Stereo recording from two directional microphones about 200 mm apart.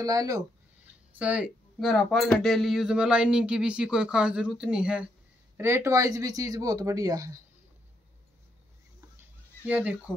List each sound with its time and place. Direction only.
0.0 s speech: 15° right (ahead or behind)
1.1 s speech: 5° right (ahead or behind)
9.7 s speech: 5° right (ahead or behind)